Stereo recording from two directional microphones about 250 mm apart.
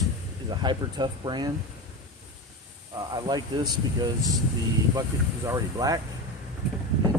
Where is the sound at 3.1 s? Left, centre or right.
Centre.